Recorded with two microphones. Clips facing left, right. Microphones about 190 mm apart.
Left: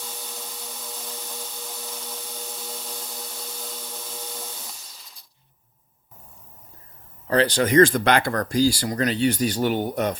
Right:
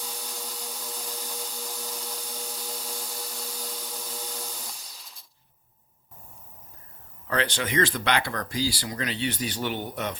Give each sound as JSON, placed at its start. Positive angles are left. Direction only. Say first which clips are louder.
{"t": 0.0, "sound": "vacuum cleaner", "louder": "even", "side_deg": 0}
{"t": 7.3, "sound": "speech", "louder": "left 8 dB", "side_deg": 35}